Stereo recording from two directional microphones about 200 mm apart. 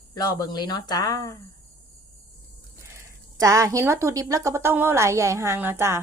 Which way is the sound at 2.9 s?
15° right (ahead or behind).